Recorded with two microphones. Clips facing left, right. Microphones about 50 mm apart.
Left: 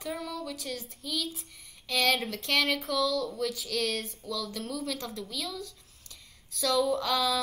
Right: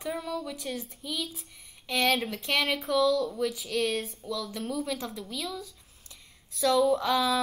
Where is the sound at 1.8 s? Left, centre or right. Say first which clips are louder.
Right 1 dB; centre.